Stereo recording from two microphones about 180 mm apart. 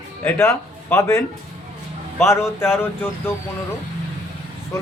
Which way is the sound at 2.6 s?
15° left (ahead or behind).